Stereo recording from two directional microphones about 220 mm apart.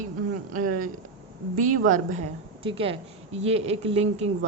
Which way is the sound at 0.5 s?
35° right (ahead or behind).